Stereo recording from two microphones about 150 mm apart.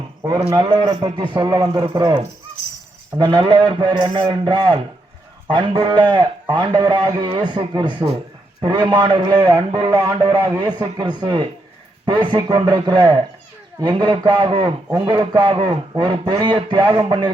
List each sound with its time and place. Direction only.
0.5 s a man's voice: 35° right (ahead or behind)
3.2 s a man's voice: 35° right (ahead or behind)